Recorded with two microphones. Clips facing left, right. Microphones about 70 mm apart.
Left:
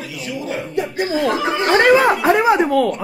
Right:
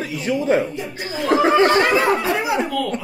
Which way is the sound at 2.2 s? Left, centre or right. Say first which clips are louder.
Left 6 dB; left.